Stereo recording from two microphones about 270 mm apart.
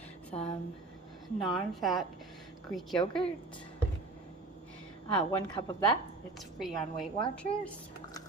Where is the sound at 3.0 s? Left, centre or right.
Centre.